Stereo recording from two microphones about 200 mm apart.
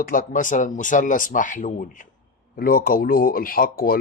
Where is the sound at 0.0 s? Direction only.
45° left (ahead or behind).